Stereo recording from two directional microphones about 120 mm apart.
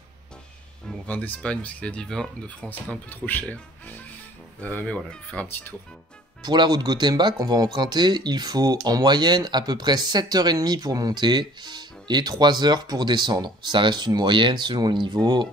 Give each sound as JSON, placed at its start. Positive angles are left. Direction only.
{"t": 0.8, "sound": "speech", "side_deg": 15}
{"t": 6.4, "sound": "speech", "side_deg": -40}